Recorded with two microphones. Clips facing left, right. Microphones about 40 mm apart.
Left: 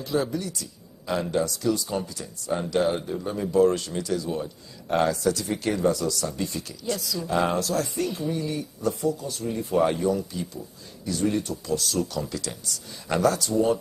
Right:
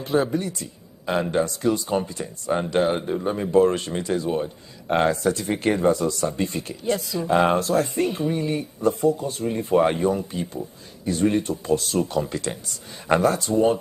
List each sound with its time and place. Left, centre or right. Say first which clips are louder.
0.0 s speech: right 4 dB; right